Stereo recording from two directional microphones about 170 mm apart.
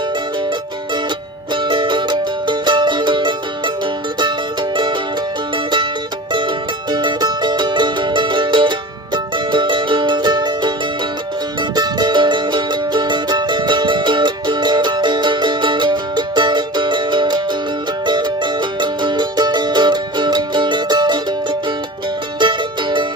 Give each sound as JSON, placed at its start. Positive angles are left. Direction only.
{"t": 1.5, "sound": "music", "side_deg": -30}
{"t": 6.3, "sound": "music", "side_deg": -25}
{"t": 11.7, "sound": "music", "side_deg": -25}